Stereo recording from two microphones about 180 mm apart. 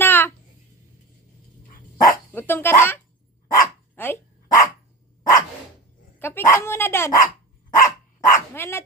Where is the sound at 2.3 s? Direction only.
10° left (ahead or behind).